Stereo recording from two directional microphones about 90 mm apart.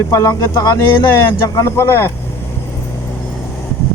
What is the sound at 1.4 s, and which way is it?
Speech, 30° left (ahead or behind).